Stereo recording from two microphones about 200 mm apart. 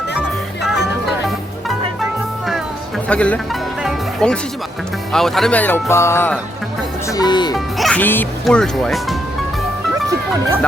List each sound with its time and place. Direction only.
3.1 s music: 5° left (ahead or behind)
5.1 s speech: centre (ahead or behind); by 7.5 s 20° left (ahead or behind)
7.5 s speech: centre (ahead or behind)
10.1 s music: 15° right (ahead or behind)